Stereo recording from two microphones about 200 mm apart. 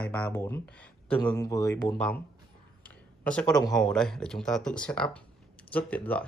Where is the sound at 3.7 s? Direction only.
Centre (ahead or behind).